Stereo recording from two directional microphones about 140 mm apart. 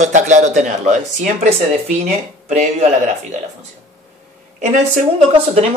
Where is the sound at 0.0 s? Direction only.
60° right (ahead or behind).